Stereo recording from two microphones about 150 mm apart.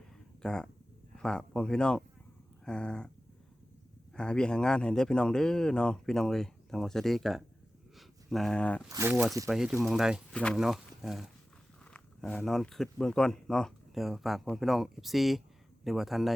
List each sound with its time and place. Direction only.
0.4 s speech: 5° left (ahead or behind)
4.1 s speech: 5° left (ahead or behind)
8.9 s speech: 15° right (ahead or behind)
9.5 s speech: 5° right (ahead or behind)